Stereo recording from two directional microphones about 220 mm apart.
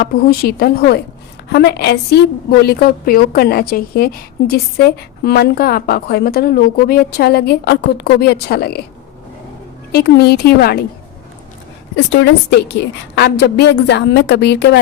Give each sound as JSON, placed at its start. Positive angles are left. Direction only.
{"t": 0.0, "sound": "a woman's voice", "side_deg": 45}
{"t": 9.9, "sound": "a woman's voice", "side_deg": 45}
{"t": 11.9, "sound": "a woman's voice", "side_deg": 50}